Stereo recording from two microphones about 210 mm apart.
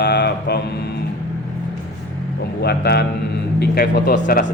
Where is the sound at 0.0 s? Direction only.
50° left (ahead or behind).